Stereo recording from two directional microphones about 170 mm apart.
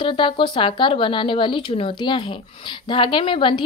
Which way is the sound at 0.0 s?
30° left (ahead or behind).